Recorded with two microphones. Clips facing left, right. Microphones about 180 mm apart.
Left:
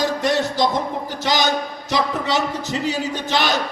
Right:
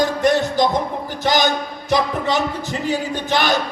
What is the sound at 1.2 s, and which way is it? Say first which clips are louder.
A man's voice: right 2 dB; 50° right (ahead or behind).